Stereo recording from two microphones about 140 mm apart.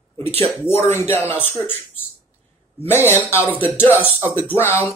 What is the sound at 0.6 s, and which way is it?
Speech, 15° left (ahead or behind).